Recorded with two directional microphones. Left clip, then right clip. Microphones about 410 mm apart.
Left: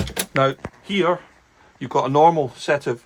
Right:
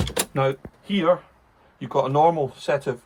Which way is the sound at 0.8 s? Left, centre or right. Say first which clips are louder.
Even; centre.